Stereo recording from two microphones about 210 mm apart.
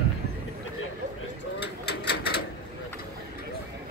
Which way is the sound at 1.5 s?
50° left (ahead or behind).